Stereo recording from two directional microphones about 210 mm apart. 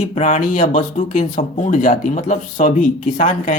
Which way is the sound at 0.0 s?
35° left (ahead or behind).